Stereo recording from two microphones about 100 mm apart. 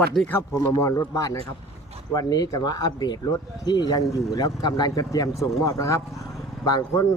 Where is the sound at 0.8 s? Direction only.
30° left (ahead or behind).